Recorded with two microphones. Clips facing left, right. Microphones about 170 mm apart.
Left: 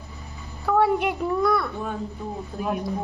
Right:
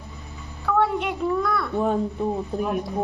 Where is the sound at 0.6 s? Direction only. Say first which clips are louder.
Left 2 dB; 10° left (ahead or behind).